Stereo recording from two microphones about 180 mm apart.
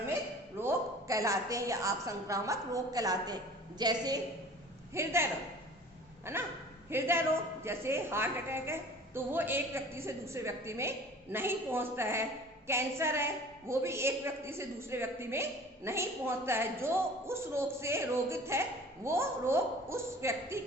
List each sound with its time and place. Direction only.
0.6 s a woman's voice: 15° right (ahead or behind)